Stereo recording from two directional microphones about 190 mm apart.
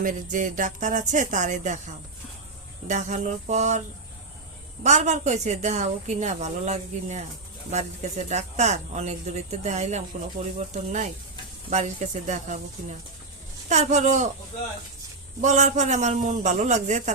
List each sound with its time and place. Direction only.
0.0 s a woman's voice: 45° right (ahead or behind)
2.8 s a woman's voice: 40° right (ahead or behind)
11.7 s a woman's voice: 40° right (ahead or behind)
15.4 s a woman's voice: 40° right (ahead or behind)